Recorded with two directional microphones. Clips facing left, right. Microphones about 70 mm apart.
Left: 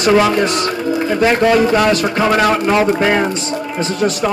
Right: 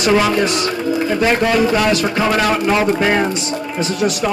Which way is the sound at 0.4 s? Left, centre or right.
Left.